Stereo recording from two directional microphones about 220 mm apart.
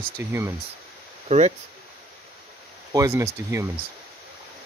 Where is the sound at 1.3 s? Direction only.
35° right (ahead or behind).